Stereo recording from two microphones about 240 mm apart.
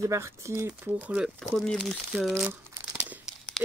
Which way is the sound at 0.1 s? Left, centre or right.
Centre.